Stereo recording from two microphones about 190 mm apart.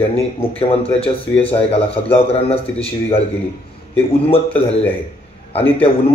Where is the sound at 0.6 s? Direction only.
30° left (ahead or behind).